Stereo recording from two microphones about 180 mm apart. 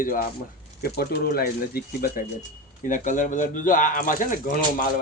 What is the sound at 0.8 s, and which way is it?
Speech, 60° left (ahead or behind).